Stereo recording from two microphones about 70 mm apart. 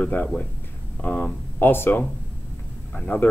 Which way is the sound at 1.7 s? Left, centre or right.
Left.